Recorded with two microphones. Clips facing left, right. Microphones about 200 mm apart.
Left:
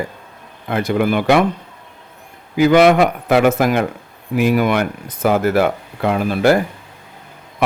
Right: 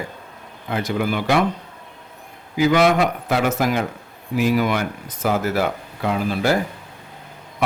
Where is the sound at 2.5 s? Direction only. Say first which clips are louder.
Left 5 dB; 60° left (ahead or behind).